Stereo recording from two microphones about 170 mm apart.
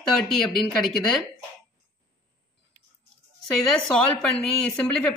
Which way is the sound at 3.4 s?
5° left (ahead or behind).